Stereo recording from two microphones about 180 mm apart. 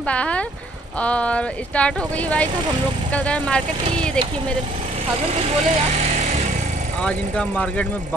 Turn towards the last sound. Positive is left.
turn(degrees=5)  # may be behind; listen again after turning